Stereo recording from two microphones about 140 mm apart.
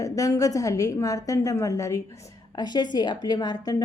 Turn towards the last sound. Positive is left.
turn(degrees=30)  # may be behind; listen again after turning